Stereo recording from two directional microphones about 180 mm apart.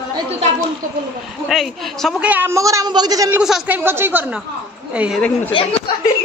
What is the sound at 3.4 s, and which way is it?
A woman's voice, 5° right (ahead or behind).